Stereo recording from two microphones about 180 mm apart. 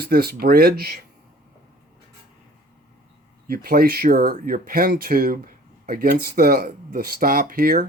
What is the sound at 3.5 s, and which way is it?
Speech, 55° right (ahead or behind).